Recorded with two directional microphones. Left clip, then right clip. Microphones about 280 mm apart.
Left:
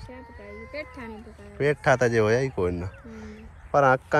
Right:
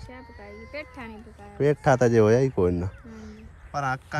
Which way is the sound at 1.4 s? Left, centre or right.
Right.